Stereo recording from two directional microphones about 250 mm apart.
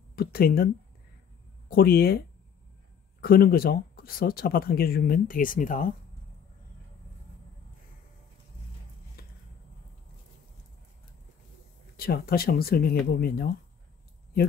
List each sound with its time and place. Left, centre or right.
0.1 s speech: left
1.7 s speech: left
12.0 s speech: left